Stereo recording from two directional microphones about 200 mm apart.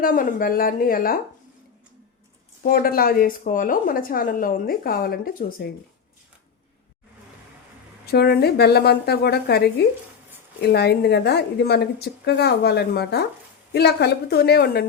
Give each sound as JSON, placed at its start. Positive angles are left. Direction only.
{"t": 0.0, "sound": "a woman's voice", "side_deg": 45}
{"t": 2.6, "sound": "a woman's voice", "side_deg": 45}
{"t": 8.0, "sound": "a woman's voice", "side_deg": 50}